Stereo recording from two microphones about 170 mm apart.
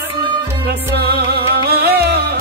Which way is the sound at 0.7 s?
70° right (ahead or behind).